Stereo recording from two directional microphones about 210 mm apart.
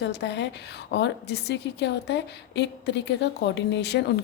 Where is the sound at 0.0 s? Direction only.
55° left (ahead or behind).